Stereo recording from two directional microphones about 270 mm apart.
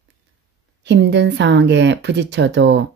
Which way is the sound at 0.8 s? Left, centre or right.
Right.